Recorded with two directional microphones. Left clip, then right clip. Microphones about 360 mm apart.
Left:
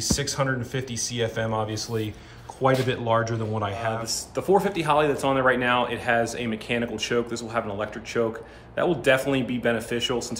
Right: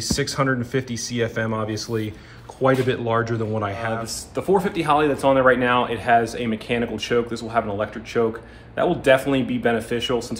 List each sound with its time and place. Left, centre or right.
0.7 s a man's voice: centre